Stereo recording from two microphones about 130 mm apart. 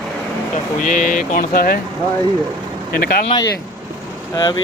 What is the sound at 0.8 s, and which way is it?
Speech, 90° left.